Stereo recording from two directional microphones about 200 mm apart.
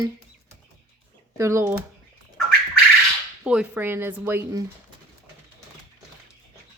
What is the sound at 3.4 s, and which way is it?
Speech, 5° right (ahead or behind).